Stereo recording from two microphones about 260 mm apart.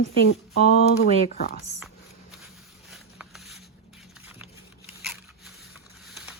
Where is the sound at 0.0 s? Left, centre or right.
Left.